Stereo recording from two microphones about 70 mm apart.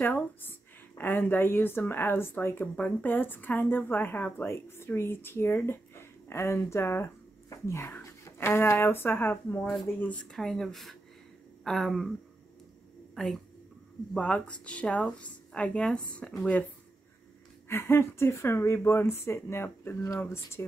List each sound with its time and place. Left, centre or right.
0.0 s speech: left
8.0 s speech: left
9.9 s speech: left
10.3 s speech: centre
13.1 s speech: centre
14.1 s a woman's voice: centre
17.6 s speech: left